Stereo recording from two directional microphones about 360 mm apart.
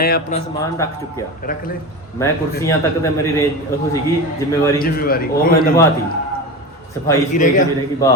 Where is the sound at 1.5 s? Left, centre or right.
Left.